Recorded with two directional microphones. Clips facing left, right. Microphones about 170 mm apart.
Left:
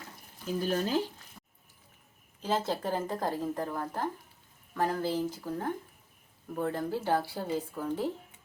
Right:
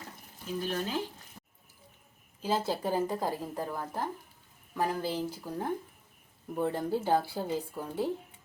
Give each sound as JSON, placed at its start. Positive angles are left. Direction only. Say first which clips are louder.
{"t": 0.6, "sound": "speech", "louder": "left 4 dB", "side_deg": 40}
{"t": 2.4, "sound": "a woman's voice", "louder": "even", "side_deg": -10}